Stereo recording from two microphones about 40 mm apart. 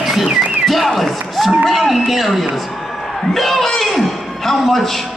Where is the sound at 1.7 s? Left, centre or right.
Centre.